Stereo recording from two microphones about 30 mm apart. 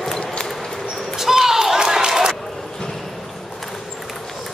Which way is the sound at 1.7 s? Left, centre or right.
Right.